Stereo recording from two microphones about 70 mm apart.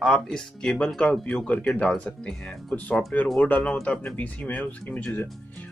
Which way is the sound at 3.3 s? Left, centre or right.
Left.